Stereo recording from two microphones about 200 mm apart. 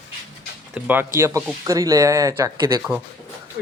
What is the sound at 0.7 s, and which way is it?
Speech, 10° right (ahead or behind).